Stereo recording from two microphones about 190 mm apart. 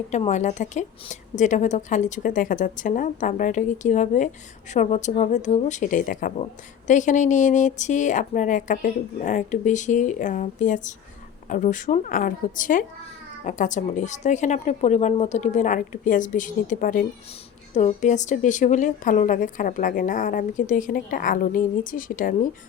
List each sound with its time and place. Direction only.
0.1 s a woman's voice: 35° left (ahead or behind)